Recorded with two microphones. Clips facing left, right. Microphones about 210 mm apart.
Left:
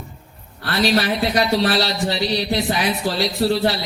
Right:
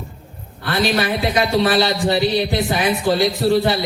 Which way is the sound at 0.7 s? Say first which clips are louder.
Even; 50° right (ahead or behind).